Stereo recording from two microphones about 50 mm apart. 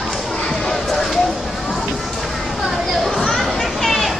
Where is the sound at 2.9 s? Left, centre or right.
Centre.